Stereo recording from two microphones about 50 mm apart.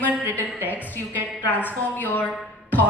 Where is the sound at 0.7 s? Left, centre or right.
Left.